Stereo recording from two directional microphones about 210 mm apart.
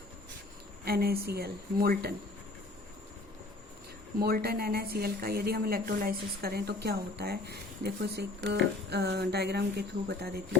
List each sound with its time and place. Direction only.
0.9 s a woman's voice: 45° right (ahead or behind)
4.2 s a woman's voice: 45° right (ahead or behind)